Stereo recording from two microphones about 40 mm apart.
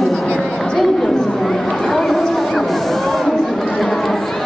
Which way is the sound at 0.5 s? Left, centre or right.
Centre.